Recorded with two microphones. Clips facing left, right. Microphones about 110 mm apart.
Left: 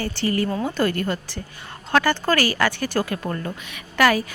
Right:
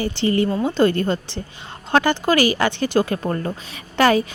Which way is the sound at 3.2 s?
35° right (ahead or behind).